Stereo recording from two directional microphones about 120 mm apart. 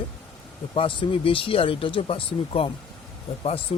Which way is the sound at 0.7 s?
45° left (ahead or behind).